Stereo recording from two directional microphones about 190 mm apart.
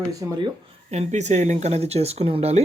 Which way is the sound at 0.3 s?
25° right (ahead or behind).